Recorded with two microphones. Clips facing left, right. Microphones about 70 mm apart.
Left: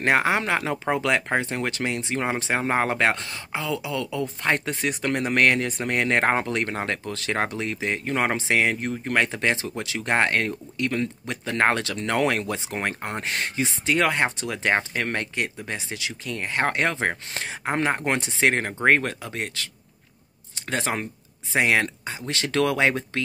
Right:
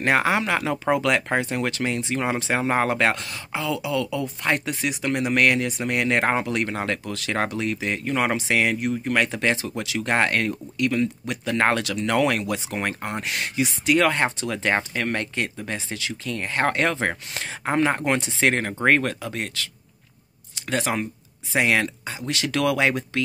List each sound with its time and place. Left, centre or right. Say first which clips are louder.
0.0 s speech: right 1 dB; left